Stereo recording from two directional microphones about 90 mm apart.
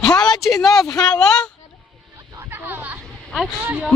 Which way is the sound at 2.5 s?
25° right (ahead or behind).